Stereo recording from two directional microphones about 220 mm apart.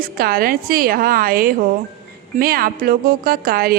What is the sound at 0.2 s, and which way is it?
A woman's voice, 45° right (ahead or behind).